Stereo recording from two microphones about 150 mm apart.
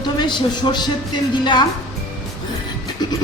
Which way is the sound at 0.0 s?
30° left (ahead or behind).